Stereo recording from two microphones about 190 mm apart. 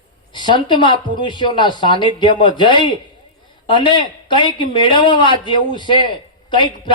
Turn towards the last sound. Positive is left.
turn(degrees=25)  # may be behind; listen again after turning